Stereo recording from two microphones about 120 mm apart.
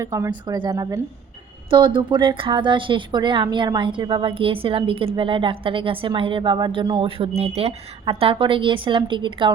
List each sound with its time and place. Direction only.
0.0 s speech: 25° right (ahead or behind)
0.3 s a woman's voice: 40° right (ahead or behind)
1.7 s speech: 40° right (ahead or behind)
7.2 s speech: 60° right (ahead or behind); by 9.5 s 40° right (ahead or behind)